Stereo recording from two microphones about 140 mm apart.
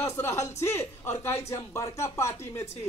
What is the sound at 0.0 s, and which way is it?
Speech, 20° left (ahead or behind).